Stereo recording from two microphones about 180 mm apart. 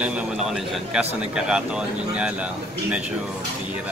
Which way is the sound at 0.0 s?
5° right (ahead or behind).